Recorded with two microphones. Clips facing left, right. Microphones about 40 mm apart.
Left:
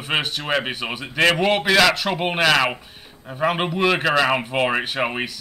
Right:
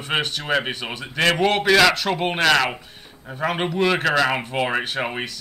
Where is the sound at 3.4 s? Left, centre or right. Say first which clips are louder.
Left 1 dB; centre.